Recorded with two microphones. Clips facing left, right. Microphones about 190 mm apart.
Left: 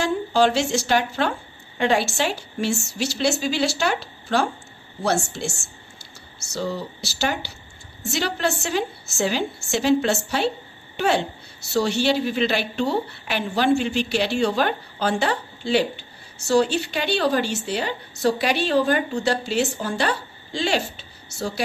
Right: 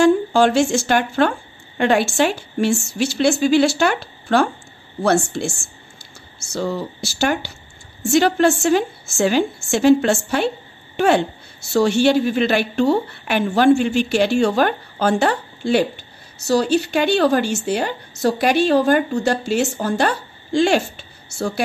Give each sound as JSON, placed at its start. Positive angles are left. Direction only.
{"t": 0.0, "sound": "a woman's voice", "side_deg": -50}
{"t": 6.5, "sound": "a woman's voice", "side_deg": -50}